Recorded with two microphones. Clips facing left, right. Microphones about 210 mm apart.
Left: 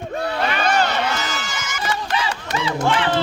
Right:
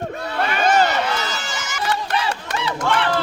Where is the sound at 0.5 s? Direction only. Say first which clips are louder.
Right 5 dB; 45° right (ahead or behind).